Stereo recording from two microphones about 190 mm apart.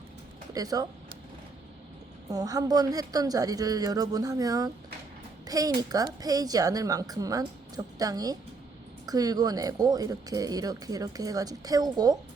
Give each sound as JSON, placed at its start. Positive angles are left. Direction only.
{"t": 0.5, "sound": "speech", "side_deg": -20}
{"t": 2.3, "sound": "speech", "side_deg": -20}